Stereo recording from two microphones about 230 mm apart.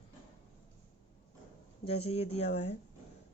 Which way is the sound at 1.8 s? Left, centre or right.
Left.